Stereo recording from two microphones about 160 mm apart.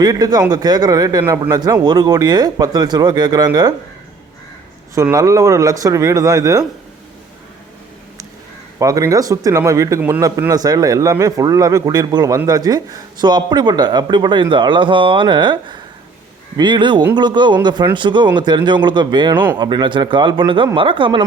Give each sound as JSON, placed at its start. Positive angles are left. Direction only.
{"t": 0.0, "sound": "speech", "side_deg": -25}
{"t": 5.1, "sound": "speech", "side_deg": -20}
{"t": 8.8, "sound": "speech", "side_deg": -20}